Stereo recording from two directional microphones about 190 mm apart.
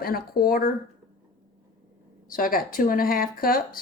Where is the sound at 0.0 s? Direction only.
50° left (ahead or behind).